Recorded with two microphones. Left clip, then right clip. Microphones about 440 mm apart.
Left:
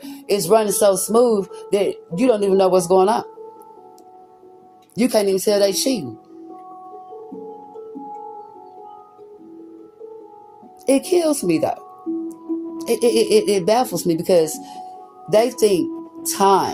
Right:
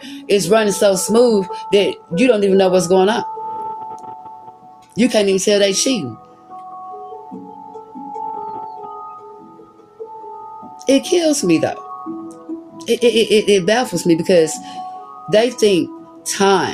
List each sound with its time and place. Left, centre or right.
0.0 s speech: left
4.9 s speech: left
10.8 s speech: left